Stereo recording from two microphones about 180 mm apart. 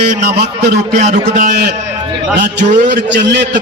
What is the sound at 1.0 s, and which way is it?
Speech, 45° right (ahead or behind).